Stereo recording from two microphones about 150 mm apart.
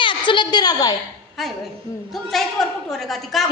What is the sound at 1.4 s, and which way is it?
A woman's voice, centre (ahead or behind).